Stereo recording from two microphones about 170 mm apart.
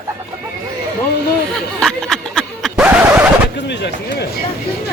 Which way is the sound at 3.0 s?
15° right (ahead or behind).